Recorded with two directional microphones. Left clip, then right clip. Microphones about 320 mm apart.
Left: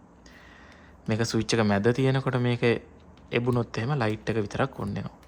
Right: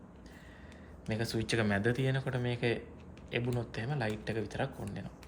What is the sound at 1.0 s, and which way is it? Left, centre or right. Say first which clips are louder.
Speech: left 8 dB; left.